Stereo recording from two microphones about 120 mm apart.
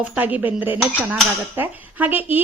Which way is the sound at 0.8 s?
Centre (ahead or behind).